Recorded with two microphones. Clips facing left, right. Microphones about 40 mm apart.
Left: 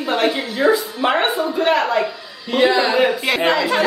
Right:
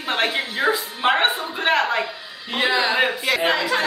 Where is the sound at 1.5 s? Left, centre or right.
Right.